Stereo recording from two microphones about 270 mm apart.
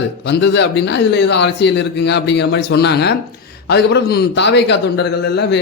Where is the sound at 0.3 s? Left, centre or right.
Left.